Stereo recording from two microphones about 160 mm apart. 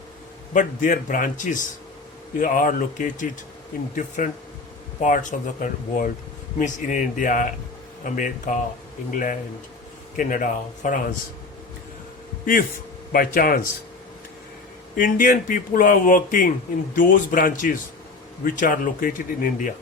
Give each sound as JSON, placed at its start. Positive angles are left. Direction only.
{"t": 0.5, "sound": "speech", "side_deg": 55}
{"t": 13.1, "sound": "speech", "side_deg": 65}
{"t": 14.9, "sound": "speech", "side_deg": 60}